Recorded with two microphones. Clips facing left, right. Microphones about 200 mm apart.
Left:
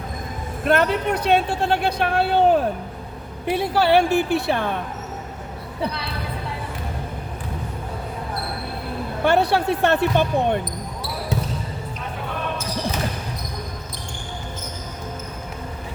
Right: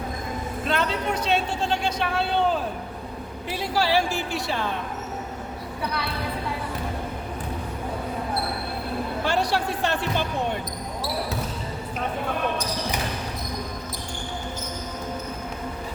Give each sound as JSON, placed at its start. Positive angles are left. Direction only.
{"t": 0.6, "sound": "a man's voice", "side_deg": 55}
{"t": 9.2, "sound": "a man's voice", "side_deg": 60}